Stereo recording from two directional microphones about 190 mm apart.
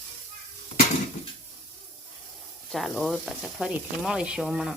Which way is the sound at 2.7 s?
Centre (ahead or behind).